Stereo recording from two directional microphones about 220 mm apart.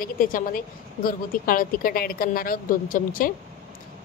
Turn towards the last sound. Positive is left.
turn(degrees=40)  # may be behind; listen again after turning